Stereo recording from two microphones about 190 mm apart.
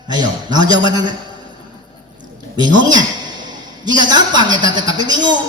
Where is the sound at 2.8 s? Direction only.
20° right (ahead or behind).